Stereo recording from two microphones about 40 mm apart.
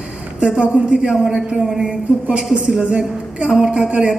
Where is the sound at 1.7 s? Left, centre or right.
Centre.